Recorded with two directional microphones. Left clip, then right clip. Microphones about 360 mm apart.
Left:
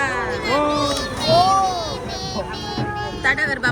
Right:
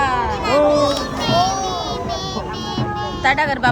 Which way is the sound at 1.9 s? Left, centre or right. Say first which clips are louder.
Right 4 dB; centre.